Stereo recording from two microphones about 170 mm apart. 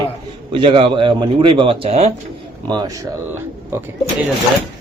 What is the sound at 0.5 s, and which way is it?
Speech, 30° right (ahead or behind).